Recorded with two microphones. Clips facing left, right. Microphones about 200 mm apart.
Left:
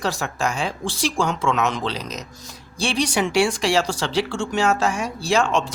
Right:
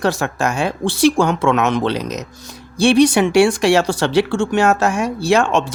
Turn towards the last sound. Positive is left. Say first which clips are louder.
# right 5 dB
turn(degrees=-55)  # may be behind; listen again after turning